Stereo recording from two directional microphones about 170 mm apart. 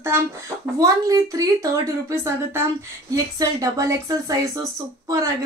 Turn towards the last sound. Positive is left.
turn(degrees=-20)  # may be behind; listen again after turning